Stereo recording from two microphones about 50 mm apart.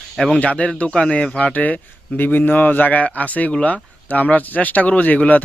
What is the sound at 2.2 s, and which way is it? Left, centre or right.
A man's voice, left.